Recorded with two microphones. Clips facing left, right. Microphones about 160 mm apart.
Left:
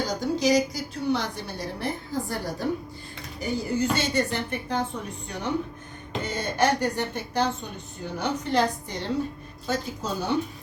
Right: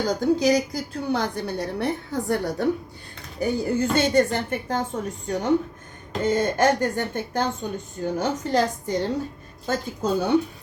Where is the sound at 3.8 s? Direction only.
50° right (ahead or behind).